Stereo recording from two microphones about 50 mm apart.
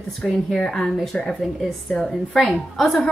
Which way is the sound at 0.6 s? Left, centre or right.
Centre.